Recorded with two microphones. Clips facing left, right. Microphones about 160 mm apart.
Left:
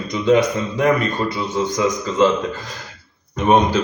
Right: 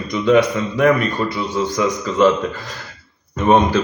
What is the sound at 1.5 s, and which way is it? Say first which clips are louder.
Speech: even; 20° left (ahead or behind).